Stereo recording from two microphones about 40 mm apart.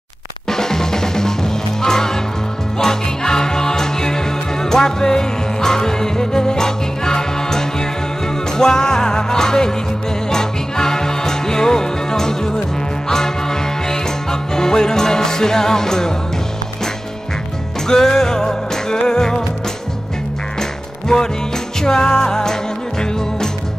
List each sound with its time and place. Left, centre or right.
0.5 s music: centre
17.8 s music: centre
21.1 s music: centre